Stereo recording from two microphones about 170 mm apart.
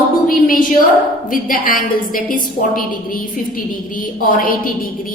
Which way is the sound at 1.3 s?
55° left (ahead or behind).